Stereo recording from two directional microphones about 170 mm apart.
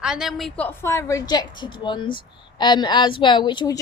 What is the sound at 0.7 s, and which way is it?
A woman's voice, 15° left (ahead or behind).